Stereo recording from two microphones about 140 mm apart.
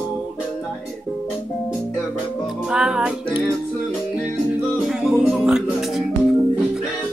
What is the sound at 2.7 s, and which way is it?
Music, 5° right (ahead or behind).